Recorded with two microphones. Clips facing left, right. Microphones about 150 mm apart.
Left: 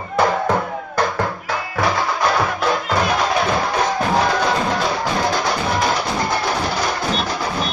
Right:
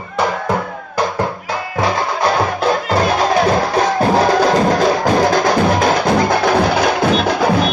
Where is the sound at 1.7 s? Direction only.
30° right (ahead or behind).